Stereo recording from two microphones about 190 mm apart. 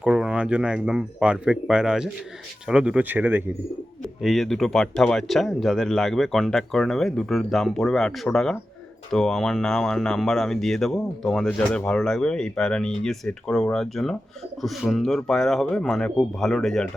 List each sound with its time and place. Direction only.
0.0 s speech: 5° right (ahead or behind)